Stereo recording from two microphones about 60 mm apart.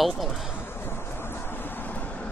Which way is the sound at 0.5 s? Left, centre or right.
Left.